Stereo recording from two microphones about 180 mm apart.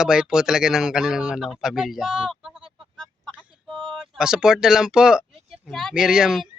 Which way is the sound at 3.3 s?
10° right (ahead or behind).